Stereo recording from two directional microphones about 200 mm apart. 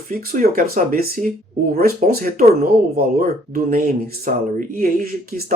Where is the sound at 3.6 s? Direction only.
45° right (ahead or behind).